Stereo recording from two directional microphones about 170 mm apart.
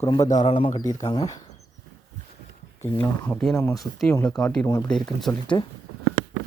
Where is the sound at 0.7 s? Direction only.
20° left (ahead or behind).